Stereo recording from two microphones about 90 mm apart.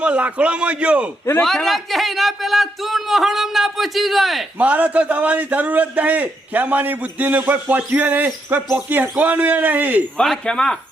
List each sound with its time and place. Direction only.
0.0 s a man's voice: 15° right (ahead or behind)
1.4 s speech: 5° left (ahead or behind)
4.5 s a man's voice: 15° right (ahead or behind)
10.2 s speech: 10° left (ahead or behind)